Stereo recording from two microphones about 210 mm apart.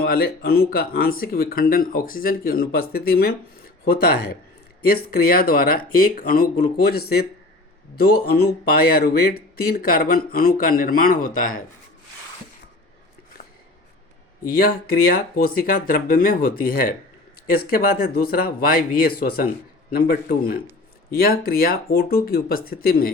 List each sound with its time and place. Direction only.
0.0 s speech: 45° left (ahead or behind)
14.4 s speech: 45° left (ahead or behind)